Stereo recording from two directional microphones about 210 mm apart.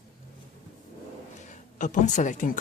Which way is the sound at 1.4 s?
35° left (ahead or behind).